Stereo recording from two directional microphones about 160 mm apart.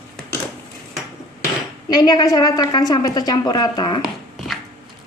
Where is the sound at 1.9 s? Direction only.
25° left (ahead or behind).